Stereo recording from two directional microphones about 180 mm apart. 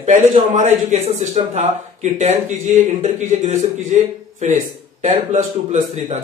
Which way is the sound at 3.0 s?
45° right (ahead or behind).